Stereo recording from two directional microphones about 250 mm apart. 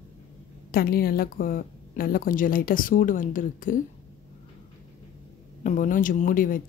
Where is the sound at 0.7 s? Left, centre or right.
Left.